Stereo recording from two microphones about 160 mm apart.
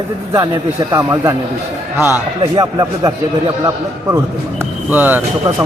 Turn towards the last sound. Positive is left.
turn(degrees=-10)  # may be behind; listen again after turning